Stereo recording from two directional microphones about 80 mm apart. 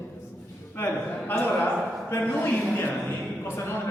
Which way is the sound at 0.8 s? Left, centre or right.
Left.